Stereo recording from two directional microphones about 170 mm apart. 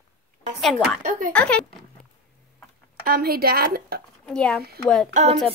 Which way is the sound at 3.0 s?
65° right (ahead or behind).